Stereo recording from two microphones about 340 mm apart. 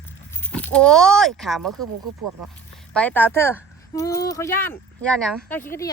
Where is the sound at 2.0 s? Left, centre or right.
Right.